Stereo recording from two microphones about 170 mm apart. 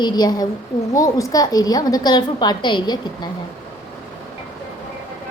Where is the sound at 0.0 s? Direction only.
25° left (ahead or behind).